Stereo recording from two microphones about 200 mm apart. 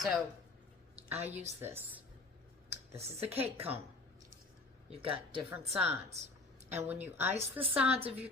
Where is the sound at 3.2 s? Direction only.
30° right (ahead or behind).